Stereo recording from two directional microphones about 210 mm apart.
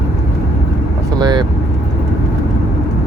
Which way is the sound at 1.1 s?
20° right (ahead or behind).